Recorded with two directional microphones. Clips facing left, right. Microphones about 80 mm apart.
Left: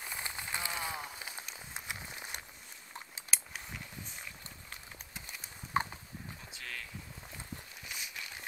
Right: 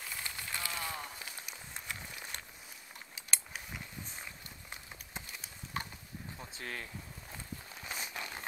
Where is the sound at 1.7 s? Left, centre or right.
Centre.